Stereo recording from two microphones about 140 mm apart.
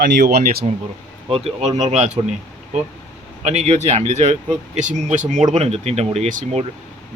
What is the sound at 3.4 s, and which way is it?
Speech, 50° right (ahead or behind).